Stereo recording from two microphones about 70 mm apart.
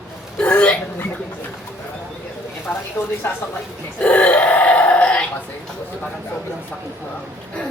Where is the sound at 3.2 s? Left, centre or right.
Left.